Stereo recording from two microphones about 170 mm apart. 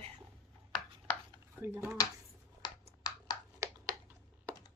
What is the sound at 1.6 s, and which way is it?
Speech, 15° right (ahead or behind).